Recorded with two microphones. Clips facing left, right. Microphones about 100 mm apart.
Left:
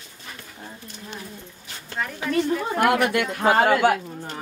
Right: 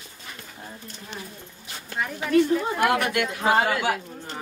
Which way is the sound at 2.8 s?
50° left (ahead or behind).